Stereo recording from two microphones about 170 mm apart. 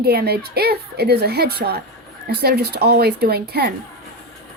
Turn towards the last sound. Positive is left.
turn(degrees=-70)  # may be behind; listen again after turning